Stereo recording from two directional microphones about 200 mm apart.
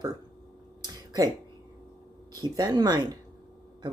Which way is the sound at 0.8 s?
20° right (ahead or behind).